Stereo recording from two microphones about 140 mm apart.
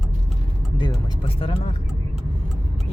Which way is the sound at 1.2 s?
40° left (ahead or behind).